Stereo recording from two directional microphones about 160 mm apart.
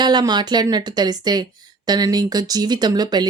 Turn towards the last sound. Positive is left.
turn(degrees=-25)  # may be behind; listen again after turning